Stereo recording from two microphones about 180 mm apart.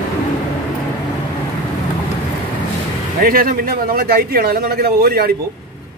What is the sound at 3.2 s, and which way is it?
A man's voice, 55° right (ahead or behind).